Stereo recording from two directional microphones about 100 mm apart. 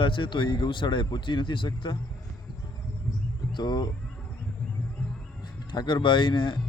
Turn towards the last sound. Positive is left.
turn(degrees=55)  # may be behind; listen again after turning